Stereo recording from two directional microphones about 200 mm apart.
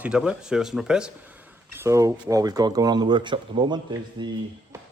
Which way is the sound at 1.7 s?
15° right (ahead or behind).